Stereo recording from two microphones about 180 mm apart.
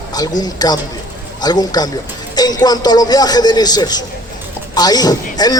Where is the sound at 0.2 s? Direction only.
20° left (ahead or behind).